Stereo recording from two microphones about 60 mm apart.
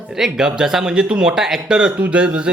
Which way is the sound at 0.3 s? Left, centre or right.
Centre.